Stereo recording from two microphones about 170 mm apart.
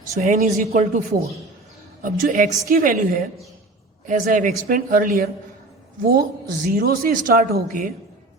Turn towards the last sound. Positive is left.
turn(degrees=-55)  # may be behind; listen again after turning